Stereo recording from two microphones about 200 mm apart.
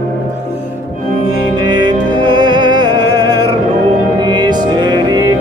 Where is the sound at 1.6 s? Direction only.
20° right (ahead or behind).